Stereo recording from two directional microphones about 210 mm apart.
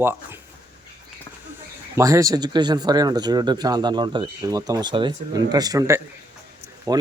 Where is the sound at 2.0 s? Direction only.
15° right (ahead or behind).